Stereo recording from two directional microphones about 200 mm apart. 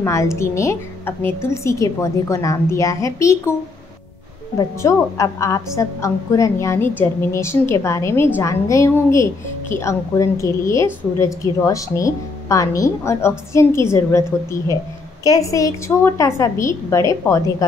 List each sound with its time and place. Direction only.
0.0 s a woman's voice: 15° left (ahead or behind)
4.6 s a woman's voice: 15° left (ahead or behind)